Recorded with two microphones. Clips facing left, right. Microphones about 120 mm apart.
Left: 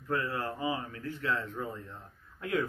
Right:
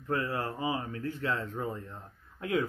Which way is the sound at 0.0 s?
30° right (ahead or behind).